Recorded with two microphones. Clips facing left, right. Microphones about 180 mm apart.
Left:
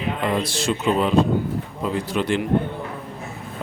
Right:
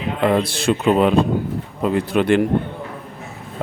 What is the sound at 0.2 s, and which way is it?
Speech, 60° right (ahead or behind).